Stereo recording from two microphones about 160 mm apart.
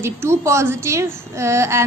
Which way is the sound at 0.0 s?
15° right (ahead or behind).